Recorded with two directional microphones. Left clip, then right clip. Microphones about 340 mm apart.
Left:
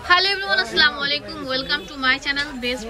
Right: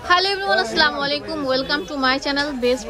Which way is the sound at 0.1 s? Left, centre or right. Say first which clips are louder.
Even; centre.